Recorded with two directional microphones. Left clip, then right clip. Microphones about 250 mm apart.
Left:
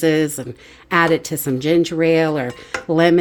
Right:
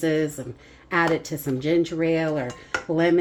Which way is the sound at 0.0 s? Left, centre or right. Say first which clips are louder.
Left 6 dB; left.